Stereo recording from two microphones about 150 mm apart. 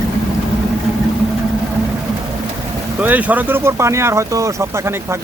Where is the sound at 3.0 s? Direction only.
10° right (ahead or behind).